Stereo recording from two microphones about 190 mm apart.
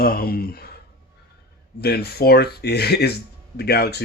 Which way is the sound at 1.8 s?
55° left (ahead or behind).